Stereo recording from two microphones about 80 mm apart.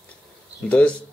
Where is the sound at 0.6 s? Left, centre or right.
Centre.